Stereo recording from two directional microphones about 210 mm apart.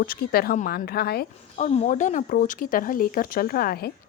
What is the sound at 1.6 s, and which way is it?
A woman's voice, 35° left (ahead or behind).